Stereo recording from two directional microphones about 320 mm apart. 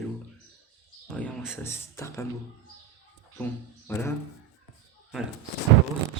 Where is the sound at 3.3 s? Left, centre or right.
Centre.